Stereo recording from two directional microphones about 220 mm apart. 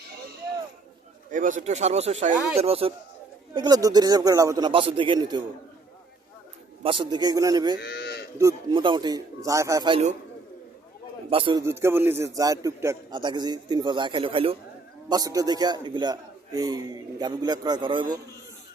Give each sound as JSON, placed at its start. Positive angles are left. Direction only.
{"t": 1.3, "sound": "a man's voice", "side_deg": -35}
{"t": 6.8, "sound": "a man's voice", "side_deg": -20}
{"t": 7.8, "sound": "livestock", "side_deg": 45}
{"t": 8.4, "sound": "a man's voice", "side_deg": -20}
{"t": 11.3, "sound": "a man's voice", "side_deg": -25}
{"t": 11.6, "sound": "a man's voice", "side_deg": -10}